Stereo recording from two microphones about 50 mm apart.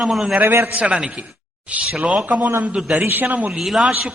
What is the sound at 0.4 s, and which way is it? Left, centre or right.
Speech, right.